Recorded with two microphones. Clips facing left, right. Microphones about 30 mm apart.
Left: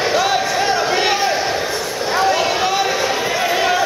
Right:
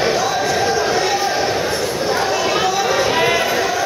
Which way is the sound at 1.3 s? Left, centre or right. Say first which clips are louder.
Right 1 dB; centre.